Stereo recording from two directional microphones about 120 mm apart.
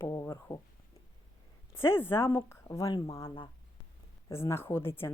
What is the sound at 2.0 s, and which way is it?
A woman's voice, 20° left (ahead or behind).